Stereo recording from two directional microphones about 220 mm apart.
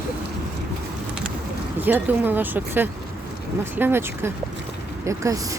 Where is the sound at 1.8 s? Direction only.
10° right (ahead or behind).